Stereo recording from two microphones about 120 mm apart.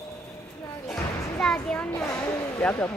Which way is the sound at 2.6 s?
20° left (ahead or behind).